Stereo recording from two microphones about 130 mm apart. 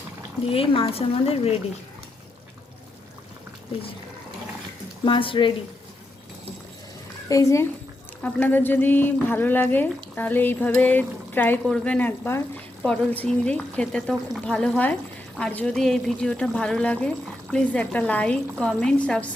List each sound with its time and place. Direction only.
0.5 s speech: 45° left (ahead or behind)
5.0 s speech: 40° left (ahead or behind)
7.3 s speech: 25° left (ahead or behind)
11.6 s speech: 5° left (ahead or behind)